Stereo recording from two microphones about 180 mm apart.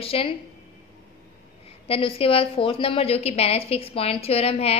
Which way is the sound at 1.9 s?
30° left (ahead or behind).